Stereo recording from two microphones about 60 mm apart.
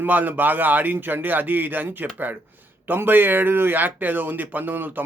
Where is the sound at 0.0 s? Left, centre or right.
Right.